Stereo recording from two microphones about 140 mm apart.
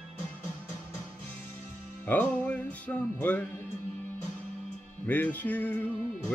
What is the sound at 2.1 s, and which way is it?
Speech, 10° left (ahead or behind).